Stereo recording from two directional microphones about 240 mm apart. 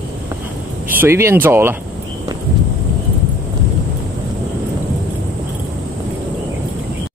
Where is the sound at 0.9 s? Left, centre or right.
Centre.